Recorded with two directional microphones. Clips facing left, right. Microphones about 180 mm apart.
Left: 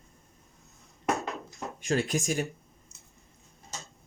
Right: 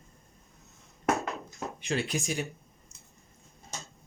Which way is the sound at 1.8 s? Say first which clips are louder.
Left 4 dB; 45° left (ahead or behind).